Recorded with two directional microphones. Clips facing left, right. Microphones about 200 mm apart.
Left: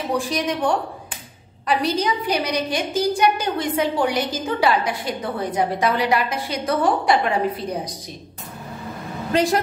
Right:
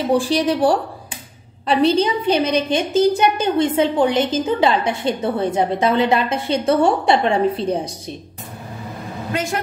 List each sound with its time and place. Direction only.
0.1 s a woman's voice: 30° right (ahead or behind)
9.3 s speech: 35° left (ahead or behind)